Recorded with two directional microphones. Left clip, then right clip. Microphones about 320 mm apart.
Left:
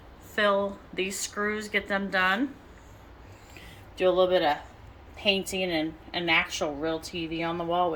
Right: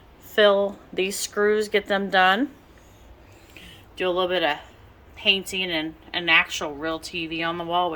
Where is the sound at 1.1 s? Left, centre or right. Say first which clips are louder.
Right 9 dB; centre.